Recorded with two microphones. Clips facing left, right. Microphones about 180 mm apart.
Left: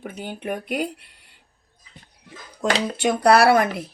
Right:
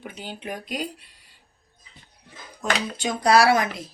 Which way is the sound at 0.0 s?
50° left (ahead or behind).